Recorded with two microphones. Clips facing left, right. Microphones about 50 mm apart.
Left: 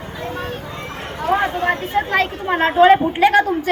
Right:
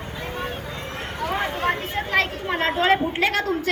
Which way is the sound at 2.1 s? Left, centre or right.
Left.